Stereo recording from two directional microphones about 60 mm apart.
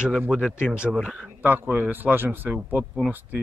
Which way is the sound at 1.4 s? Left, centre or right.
Right.